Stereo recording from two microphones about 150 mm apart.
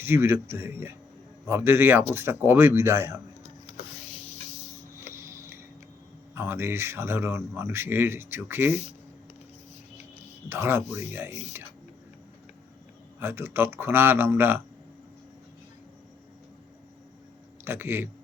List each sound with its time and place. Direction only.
0.0 s speech: 15° right (ahead or behind)
4.9 s a sound: 15° right (ahead or behind)
6.3 s speech: 15° right (ahead or behind)
10.5 s speech: 15° right (ahead or behind)
13.1 s speech: 15° right (ahead or behind)
17.7 s speech: 15° right (ahead or behind)